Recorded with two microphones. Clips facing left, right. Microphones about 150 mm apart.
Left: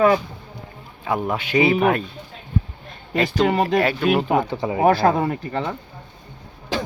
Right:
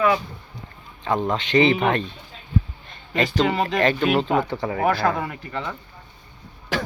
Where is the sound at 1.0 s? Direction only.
10° left (ahead or behind).